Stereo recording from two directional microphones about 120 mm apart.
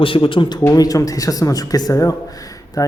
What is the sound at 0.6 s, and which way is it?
Speech, 30° left (ahead or behind).